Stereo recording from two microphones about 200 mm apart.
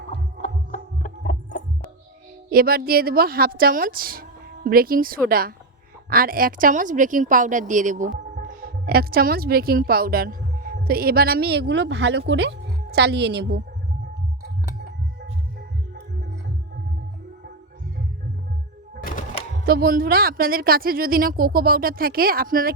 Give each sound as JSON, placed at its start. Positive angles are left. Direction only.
{"t": 0.1, "sound": "music", "side_deg": 35}
{"t": 2.5, "sound": "a woman's voice", "side_deg": -50}
{"t": 19.0, "sound": "a sound", "side_deg": 40}
{"t": 19.6, "sound": "a woman's voice", "side_deg": -50}